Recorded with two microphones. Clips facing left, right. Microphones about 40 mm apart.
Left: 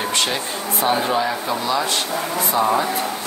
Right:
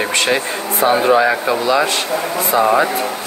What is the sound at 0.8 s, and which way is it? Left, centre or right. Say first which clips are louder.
Speech: right 7 dB; right.